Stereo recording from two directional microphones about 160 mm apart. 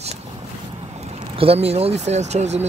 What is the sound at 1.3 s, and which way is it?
Speech, 35° right (ahead or behind).